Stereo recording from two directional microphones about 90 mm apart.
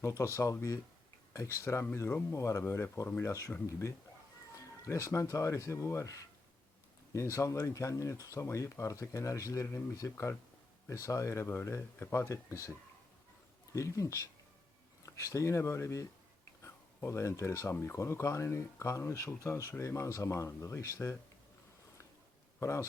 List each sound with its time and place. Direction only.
0.2 s speech: 35° left (ahead or behind)
13.7 s speech: 35° left (ahead or behind)
22.6 s speech: 35° left (ahead or behind)